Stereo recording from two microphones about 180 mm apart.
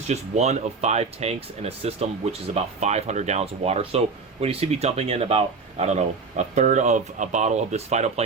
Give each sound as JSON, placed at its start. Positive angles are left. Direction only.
{"t": 0.1, "sound": "speech", "side_deg": -35}